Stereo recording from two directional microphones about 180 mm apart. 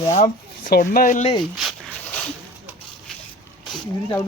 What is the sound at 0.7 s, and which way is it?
Speech, 50° left (ahead or behind).